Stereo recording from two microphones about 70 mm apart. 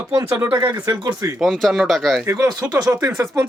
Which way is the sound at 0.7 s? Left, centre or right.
Right.